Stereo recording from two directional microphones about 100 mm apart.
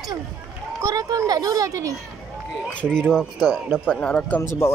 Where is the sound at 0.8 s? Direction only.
35° right (ahead or behind).